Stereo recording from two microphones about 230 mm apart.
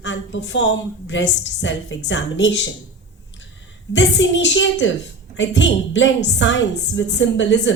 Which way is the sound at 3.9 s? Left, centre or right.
Left.